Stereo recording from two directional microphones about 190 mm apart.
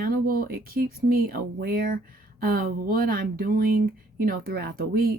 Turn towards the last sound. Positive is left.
turn(degrees=-50)  # may be behind; listen again after turning